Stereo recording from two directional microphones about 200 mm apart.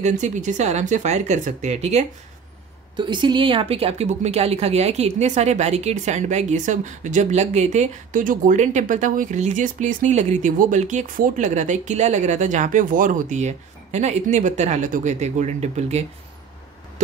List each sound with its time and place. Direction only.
0.0 s a woman's voice: 35° right (ahead or behind)
3.0 s a woman's voice: 25° right (ahead or behind)